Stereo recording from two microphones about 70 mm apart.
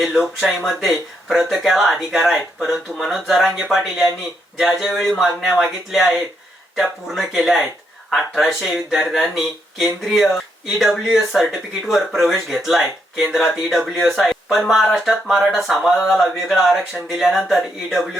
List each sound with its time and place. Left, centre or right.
0.0 s speech: centre